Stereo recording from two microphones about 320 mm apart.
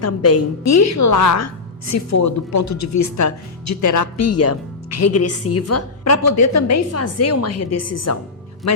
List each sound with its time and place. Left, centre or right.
0.0 s a woman's voice: left